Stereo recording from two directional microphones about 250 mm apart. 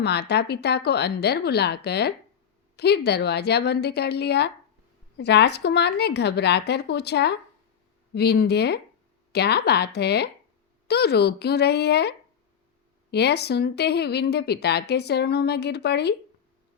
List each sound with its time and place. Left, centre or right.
0.0 s speech: left